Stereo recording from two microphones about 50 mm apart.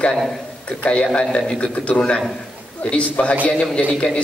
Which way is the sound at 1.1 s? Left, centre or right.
Left.